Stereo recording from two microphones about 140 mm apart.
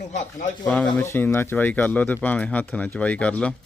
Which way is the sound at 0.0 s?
60° left (ahead or behind).